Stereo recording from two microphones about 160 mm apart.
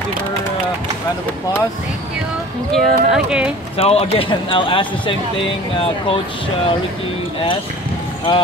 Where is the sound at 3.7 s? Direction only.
40° left (ahead or behind).